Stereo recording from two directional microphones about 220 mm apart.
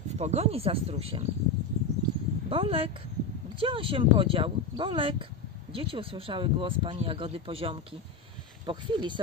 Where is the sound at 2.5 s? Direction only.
25° right (ahead or behind).